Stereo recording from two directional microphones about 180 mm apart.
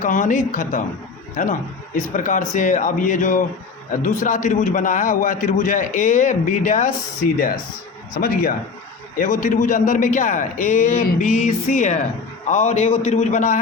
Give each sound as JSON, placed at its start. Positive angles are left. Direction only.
{"t": 0.0, "sound": "a man's voice", "side_deg": 45}